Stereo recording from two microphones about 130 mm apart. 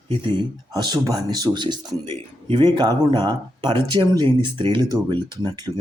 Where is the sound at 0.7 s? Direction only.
35° right (ahead or behind).